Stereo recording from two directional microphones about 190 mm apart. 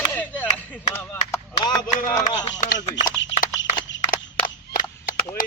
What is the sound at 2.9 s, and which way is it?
Speech, 75° left (ahead or behind).